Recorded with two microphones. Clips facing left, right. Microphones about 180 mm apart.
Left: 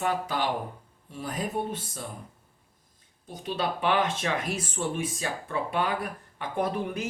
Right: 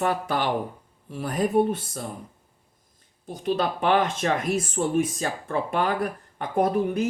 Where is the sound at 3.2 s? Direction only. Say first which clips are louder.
Right 5 dB; 45° right (ahead or behind).